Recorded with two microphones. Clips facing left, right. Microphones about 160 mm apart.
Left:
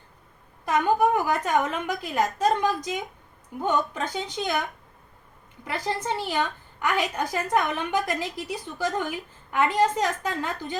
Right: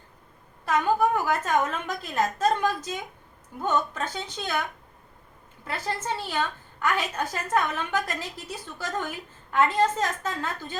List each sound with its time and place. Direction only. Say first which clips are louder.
0.6 s a woman's voice: left 1 dB; 15° left (ahead or behind)
5.6 s a woman's voice: left 2 dB; 15° left (ahead or behind)